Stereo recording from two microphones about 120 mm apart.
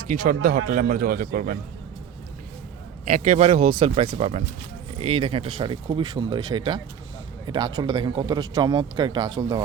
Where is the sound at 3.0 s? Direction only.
85° right.